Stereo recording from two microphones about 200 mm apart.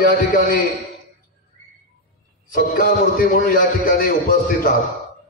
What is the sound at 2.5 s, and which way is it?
A man's voice, 45° left (ahead or behind).